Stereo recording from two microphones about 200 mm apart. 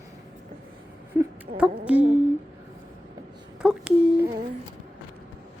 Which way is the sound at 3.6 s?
5° right (ahead or behind).